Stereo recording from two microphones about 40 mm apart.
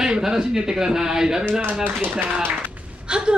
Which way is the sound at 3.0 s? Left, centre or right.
Right.